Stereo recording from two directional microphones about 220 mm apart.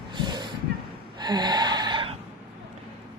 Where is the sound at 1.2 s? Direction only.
20° right (ahead or behind).